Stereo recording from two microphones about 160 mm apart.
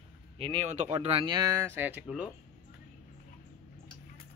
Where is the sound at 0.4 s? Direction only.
35° right (ahead or behind); by 2.3 s 5° right (ahead or behind).